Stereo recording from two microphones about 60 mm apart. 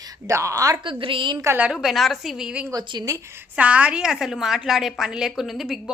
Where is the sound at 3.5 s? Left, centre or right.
Right.